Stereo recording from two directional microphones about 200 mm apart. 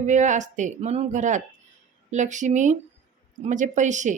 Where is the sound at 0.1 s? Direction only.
35° right (ahead or behind).